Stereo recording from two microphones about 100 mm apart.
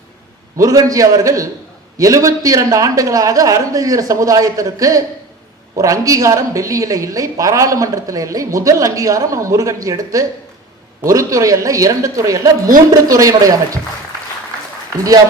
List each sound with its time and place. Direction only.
0.5 s a woman's voice: 35° right (ahead or behind)